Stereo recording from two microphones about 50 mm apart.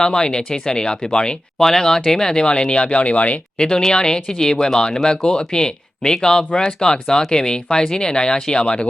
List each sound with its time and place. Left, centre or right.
0.0 s speech: centre
3.6 s speech: centre